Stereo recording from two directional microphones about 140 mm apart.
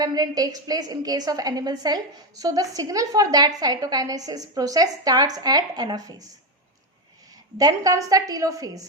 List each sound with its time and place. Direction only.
0.0 s a woman's voice: 25° right (ahead or behind)
7.6 s a woman's voice: 25° right (ahead or behind)